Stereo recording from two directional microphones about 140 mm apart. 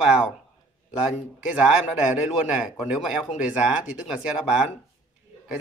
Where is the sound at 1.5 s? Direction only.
5° right (ahead or behind).